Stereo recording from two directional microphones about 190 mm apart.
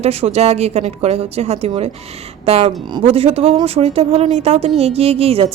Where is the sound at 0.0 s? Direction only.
35° right (ahead or behind).